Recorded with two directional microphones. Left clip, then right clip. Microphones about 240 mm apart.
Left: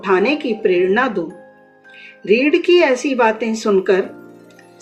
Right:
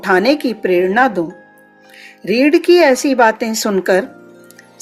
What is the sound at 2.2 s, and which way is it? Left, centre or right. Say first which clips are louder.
Speech: right 2 dB; right.